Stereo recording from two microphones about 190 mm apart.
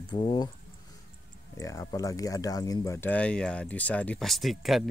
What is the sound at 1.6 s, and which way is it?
Speech, 15° left (ahead or behind).